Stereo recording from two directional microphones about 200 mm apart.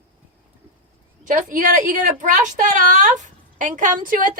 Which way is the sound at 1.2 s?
40° right (ahead or behind).